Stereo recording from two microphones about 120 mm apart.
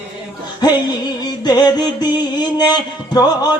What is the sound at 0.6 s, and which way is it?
Music, 35° left (ahead or behind).